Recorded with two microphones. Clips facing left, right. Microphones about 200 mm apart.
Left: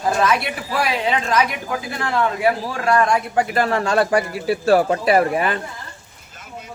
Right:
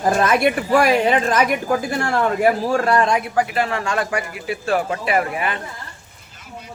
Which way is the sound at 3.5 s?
40° left (ahead or behind).